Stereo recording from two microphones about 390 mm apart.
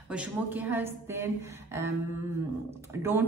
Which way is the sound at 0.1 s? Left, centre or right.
Centre.